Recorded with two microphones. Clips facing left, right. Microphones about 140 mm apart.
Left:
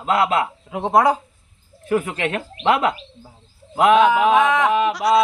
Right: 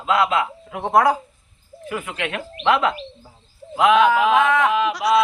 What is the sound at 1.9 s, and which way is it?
Speech, 40° left (ahead or behind).